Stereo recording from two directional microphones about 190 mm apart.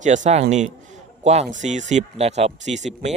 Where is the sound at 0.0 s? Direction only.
40° right (ahead or behind).